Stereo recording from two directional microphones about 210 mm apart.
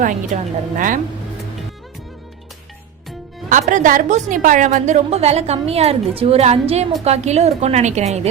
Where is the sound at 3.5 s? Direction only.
35° right (ahead or behind).